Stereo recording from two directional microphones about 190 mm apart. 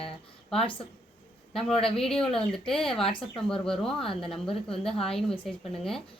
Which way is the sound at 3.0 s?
30° left (ahead or behind).